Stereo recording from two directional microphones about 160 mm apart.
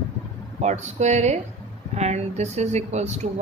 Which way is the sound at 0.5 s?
45° right (ahead or behind).